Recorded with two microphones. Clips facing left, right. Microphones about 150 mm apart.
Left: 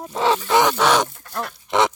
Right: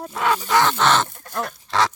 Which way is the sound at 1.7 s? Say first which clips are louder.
Left 3 dB; 20° left (ahead or behind).